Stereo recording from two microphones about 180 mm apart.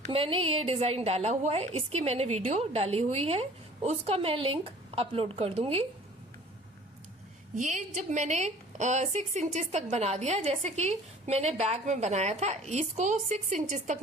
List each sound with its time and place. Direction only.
0.1 s a woman's voice: 30° right (ahead or behind)
7.5 s a woman's voice: 45° right (ahead or behind)